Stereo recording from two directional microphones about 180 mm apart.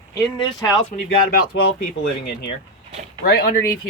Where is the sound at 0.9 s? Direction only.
60° left (ahead or behind).